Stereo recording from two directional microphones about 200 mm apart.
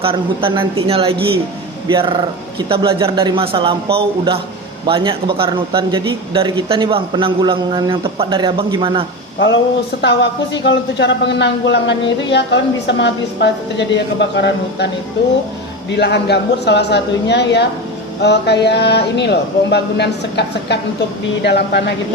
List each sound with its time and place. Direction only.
0.0 s speech: 25° right (ahead or behind)
10.0 s speech: 60° left (ahead or behind)